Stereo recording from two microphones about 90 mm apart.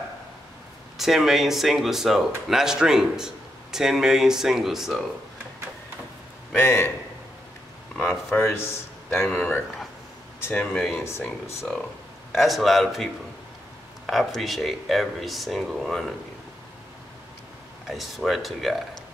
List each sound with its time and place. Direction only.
0.9 s speech: 5° right (ahead or behind)
6.5 s a man's voice: 25° left (ahead or behind)
8.3 s speech: 30° left (ahead or behind)
10.4 s speech: 25° left (ahead or behind)
10.7 s speech: centre (ahead or behind)
12.4 s speech: centre (ahead or behind)
17.8 s speech: centre (ahead or behind)